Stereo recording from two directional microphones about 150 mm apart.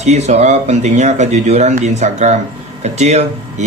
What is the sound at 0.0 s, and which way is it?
Speech, 50° right (ahead or behind).